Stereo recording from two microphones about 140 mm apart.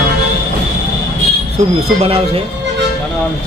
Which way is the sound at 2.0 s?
45° right (ahead or behind).